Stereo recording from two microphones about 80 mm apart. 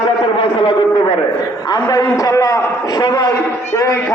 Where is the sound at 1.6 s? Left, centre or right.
Left.